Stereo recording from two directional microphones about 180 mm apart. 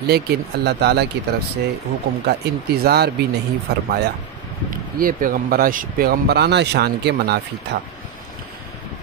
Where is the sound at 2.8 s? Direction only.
65° right (ahead or behind).